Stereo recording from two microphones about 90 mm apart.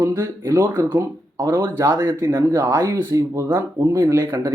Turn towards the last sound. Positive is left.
turn(degrees=-35)  # may be behind; listen again after turning